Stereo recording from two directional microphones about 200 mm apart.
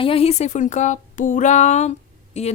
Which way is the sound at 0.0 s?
30° left (ahead or behind).